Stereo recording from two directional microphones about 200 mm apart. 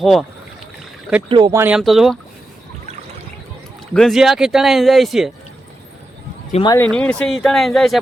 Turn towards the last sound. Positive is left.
turn(degrees=0)  # may be behind; listen again after turning